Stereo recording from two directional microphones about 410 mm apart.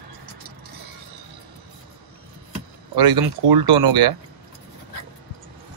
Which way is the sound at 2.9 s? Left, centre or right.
Right.